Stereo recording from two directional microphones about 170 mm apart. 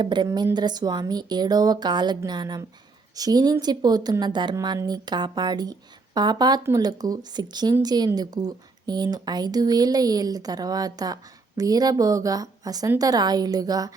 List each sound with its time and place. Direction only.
0.0 s speech: 25° right (ahead or behind)